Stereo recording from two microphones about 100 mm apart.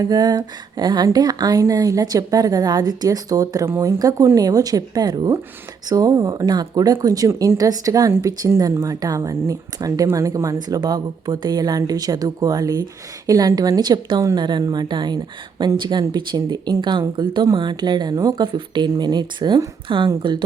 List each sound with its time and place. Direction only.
0.0 s a woman's voice: 40° right (ahead or behind)